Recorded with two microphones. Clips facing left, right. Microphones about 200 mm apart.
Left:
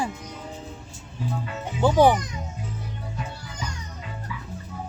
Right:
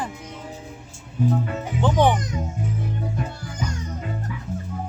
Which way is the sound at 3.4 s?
50° right (ahead or behind).